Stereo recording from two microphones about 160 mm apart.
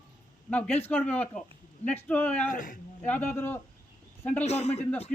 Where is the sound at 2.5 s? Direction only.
60° left (ahead or behind).